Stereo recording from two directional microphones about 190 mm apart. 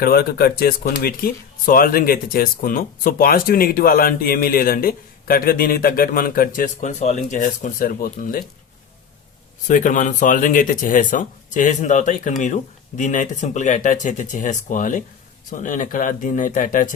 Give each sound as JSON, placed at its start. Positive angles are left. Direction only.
{"t": 0.0, "sound": "speech", "side_deg": 55}
{"t": 9.6, "sound": "speech", "side_deg": 40}